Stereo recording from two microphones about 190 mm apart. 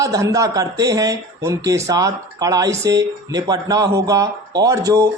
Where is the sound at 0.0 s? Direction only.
15° right (ahead or behind).